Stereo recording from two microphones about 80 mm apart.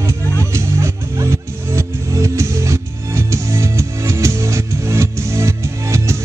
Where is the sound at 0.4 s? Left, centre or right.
Right.